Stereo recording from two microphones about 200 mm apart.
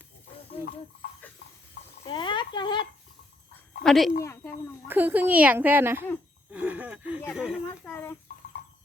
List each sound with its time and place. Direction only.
2.0 s a sound: 25° left (ahead or behind)
3.8 s speech: centre (ahead or behind)
4.2 s speech: 15° left (ahead or behind)
4.9 s speech: 10° right (ahead or behind)
6.5 s a sound: 10° right (ahead or behind)
7.3 s speech: 5° right (ahead or behind)
7.7 s a child's voice: 10° left (ahead or behind)